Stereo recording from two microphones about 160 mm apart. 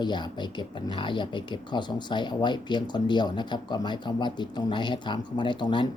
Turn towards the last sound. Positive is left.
turn(degrees=30)  # may be behind; listen again after turning